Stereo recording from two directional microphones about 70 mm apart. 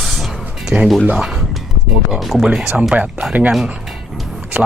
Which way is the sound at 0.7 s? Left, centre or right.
Centre.